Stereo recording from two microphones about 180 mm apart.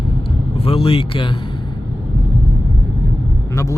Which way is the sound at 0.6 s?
30° left (ahead or behind).